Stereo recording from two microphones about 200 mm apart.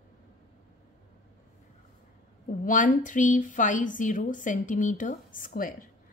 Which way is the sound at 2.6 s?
40° left (ahead or behind).